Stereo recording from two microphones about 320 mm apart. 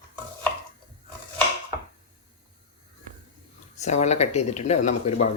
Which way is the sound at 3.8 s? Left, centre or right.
Left.